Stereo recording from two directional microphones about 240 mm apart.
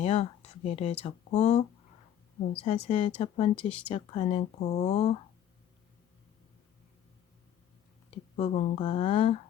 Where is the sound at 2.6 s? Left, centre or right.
Left.